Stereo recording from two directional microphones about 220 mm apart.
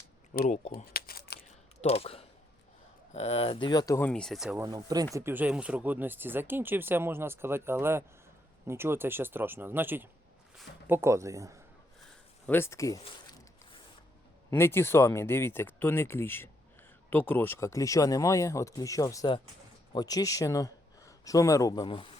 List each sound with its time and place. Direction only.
0.3 s speech: 35° left (ahead or behind)
1.8 s speech: 25° left (ahead or behind); by 4.6 s centre (ahead or behind)
4.6 s speech: 15° right (ahead or behind)
12.5 s a sound: 10° left (ahead or behind)
14.5 s speech: 10° left (ahead or behind)